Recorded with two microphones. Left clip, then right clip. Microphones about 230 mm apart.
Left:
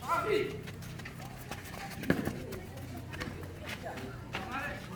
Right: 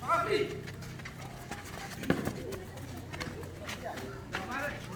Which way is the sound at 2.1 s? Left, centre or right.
Centre.